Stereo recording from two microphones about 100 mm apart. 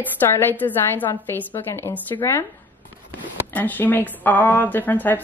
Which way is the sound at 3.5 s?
15° left (ahead or behind).